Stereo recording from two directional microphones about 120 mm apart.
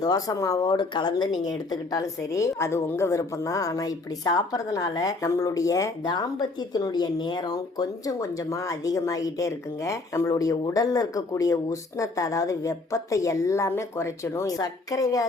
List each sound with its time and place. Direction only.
0.0 s a woman's voice: 30° left (ahead or behind)